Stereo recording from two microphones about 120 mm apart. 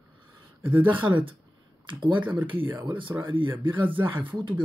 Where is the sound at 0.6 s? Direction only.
15° right (ahead or behind).